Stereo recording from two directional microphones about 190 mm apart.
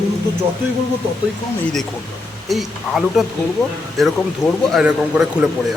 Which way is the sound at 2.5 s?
Centre (ahead or behind).